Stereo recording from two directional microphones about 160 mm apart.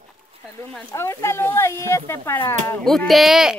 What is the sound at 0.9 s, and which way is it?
Speech, 15° left (ahead or behind).